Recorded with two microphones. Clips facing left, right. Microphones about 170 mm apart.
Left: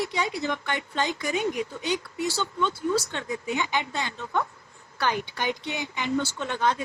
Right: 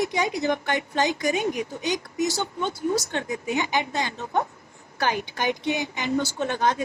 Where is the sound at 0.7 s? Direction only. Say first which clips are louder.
Right 4 dB; 20° right (ahead or behind).